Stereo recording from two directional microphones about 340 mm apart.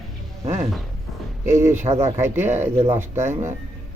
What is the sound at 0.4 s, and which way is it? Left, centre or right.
Speech, centre.